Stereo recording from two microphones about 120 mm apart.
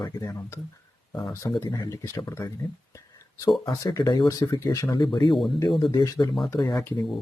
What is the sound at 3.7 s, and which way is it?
Speech, 30° left (ahead or behind).